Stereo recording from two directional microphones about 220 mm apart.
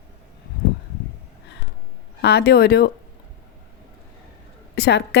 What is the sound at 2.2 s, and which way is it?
Speech, 45° left (ahead or behind).